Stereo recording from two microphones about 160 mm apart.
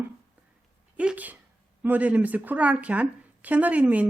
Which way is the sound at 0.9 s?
10° right (ahead or behind).